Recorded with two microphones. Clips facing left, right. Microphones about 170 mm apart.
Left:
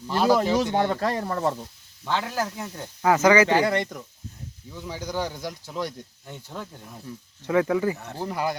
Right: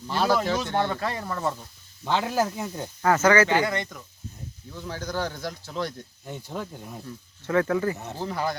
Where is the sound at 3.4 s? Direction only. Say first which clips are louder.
Left 3 dB; 35° left (ahead or behind).